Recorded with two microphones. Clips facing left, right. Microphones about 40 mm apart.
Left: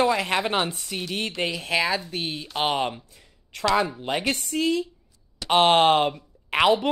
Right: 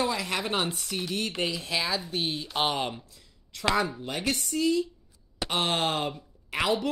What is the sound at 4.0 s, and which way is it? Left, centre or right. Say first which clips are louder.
A woman's voice: left 4 dB; left.